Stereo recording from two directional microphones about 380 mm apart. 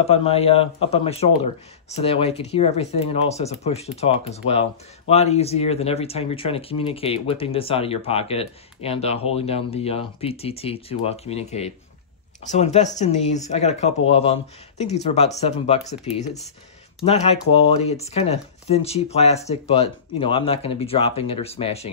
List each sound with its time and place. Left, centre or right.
0.0 s speech: centre